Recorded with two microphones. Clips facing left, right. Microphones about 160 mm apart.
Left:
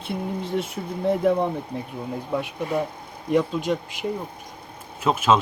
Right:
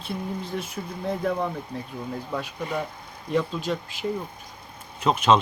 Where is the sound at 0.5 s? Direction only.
25° left (ahead or behind).